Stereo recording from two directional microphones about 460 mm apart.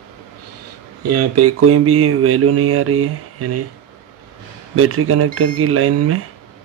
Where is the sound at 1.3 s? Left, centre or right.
Right.